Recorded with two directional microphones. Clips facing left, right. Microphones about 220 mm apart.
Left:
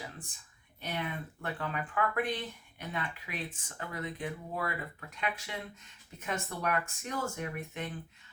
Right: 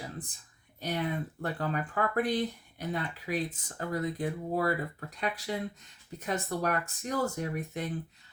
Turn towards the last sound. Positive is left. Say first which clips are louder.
# right 4 dB
turn(degrees=-35)  # may be behind; listen again after turning